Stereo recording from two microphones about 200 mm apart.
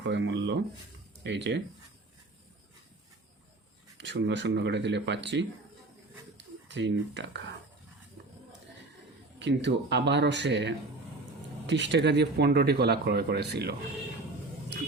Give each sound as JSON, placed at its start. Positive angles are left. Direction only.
{"t": 0.0, "sound": "speech", "side_deg": -60}
{"t": 3.9, "sound": "speech", "side_deg": -60}
{"t": 6.3, "sound": "a sound", "side_deg": -60}
{"t": 9.4, "sound": "speech", "side_deg": -60}